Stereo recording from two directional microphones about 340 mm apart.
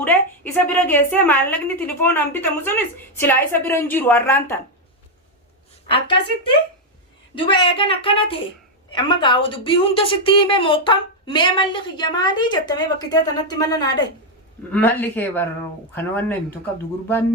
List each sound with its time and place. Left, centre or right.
0.0 s a woman's voice: centre
7.3 s a woman's voice: centre